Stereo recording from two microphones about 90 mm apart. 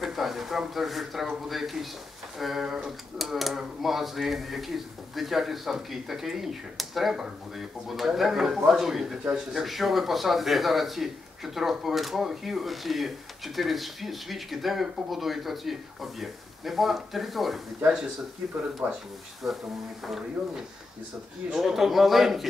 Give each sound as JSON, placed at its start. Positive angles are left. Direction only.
{"t": 0.0, "sound": "speech", "side_deg": 0}
{"t": 18.8, "sound": "speech", "side_deg": -20}
{"t": 19.4, "sound": "speech", "side_deg": -5}